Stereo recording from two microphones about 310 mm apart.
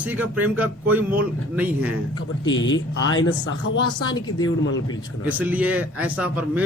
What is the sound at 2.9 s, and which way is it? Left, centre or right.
Speech, left.